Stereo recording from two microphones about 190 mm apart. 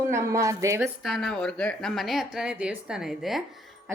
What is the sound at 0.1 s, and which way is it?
Speech, 15° right (ahead or behind).